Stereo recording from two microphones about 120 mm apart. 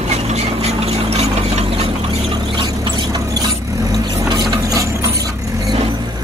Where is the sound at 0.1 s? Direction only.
65° right (ahead or behind).